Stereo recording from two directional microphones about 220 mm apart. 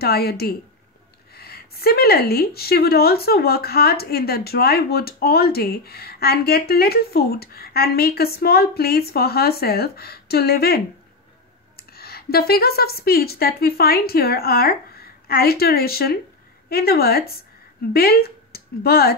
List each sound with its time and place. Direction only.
0.0 s a woman's voice: 45° left (ahead or behind)
11.9 s a woman's voice: 45° left (ahead or behind)